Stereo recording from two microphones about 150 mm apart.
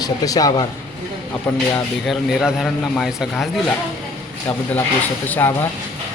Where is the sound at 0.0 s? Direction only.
25° left (ahead or behind).